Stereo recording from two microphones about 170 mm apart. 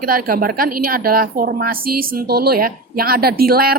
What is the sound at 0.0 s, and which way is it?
A woman's voice, 55° right (ahead or behind).